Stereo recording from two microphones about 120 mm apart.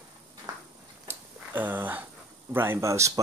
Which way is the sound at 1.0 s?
15° right (ahead or behind).